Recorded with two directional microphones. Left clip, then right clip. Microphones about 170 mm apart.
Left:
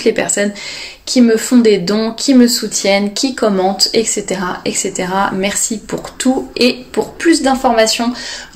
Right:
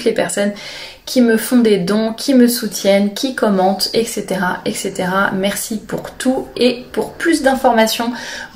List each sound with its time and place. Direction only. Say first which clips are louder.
0.0 s speech: left 2 dB; 35° left (ahead or behind)
7.2 s speech: left 1 dB; 35° left (ahead or behind)